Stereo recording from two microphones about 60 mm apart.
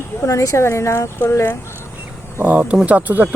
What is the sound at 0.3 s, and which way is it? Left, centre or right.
Speech, left.